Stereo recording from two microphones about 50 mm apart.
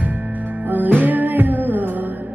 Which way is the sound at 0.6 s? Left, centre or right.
Right.